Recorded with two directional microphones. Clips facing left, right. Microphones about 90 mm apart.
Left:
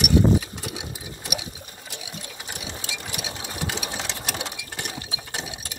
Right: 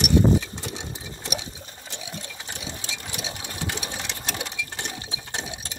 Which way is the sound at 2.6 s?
25° right (ahead or behind).